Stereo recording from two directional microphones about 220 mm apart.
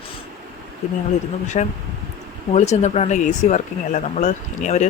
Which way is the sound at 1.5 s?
35° left (ahead or behind).